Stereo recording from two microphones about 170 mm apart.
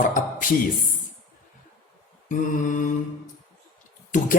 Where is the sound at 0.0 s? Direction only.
50° left (ahead or behind).